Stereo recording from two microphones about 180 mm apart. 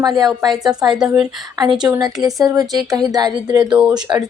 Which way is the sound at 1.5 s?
20° right (ahead or behind).